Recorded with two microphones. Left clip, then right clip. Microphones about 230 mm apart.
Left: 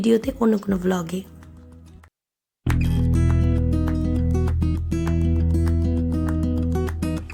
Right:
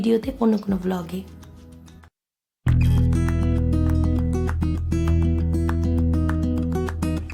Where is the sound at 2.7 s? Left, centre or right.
Centre.